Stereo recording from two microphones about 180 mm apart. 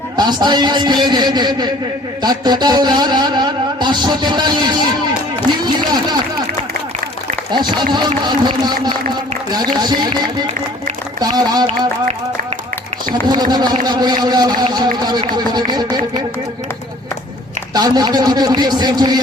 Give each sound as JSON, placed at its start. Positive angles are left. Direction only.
{"t": 0.2, "sound": "music", "side_deg": -25}
{"t": 5.5, "sound": "run", "side_deg": -25}
{"t": 7.5, "sound": "music", "side_deg": -25}
{"t": 11.2, "sound": "music", "side_deg": -20}
{"t": 13.2, "sound": "music", "side_deg": -25}
{"t": 17.7, "sound": "music", "side_deg": -20}